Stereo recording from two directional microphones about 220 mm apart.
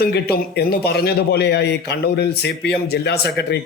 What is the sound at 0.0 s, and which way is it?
Speech, 45° left (ahead or behind).